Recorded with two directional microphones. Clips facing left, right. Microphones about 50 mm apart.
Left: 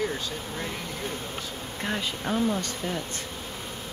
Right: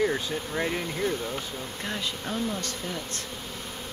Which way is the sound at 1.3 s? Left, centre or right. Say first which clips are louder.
Right 1 dB; centre.